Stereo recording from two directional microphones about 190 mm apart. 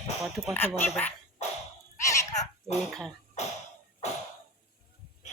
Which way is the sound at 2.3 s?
35° left (ahead or behind).